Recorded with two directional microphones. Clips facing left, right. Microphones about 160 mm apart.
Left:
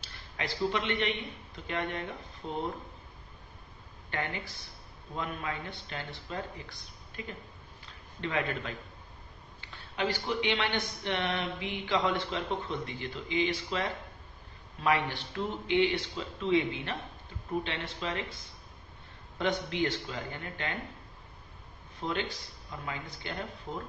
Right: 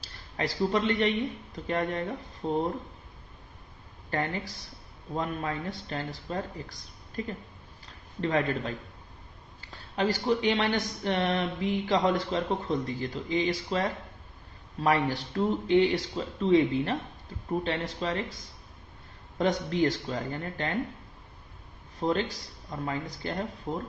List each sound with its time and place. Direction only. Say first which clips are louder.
0.0 s speech: right 6 dB; 35° right (ahead or behind)
4.1 s speech: right 5 dB; 35° right (ahead or behind)
19.3 s speech: right 4 dB; 40° right (ahead or behind)
22.0 s speech: right 6 dB; 40° right (ahead or behind)